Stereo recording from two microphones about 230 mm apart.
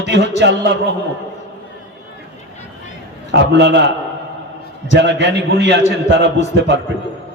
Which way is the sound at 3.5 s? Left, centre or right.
Right.